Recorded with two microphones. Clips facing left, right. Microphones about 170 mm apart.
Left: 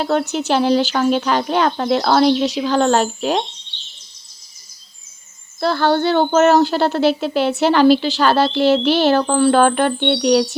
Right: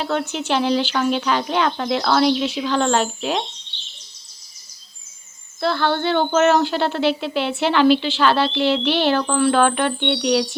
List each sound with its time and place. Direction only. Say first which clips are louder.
0.0 s speech: left 5 dB; 40° left (ahead or behind)
5.5 s speech: left 4 dB; 40° left (ahead or behind)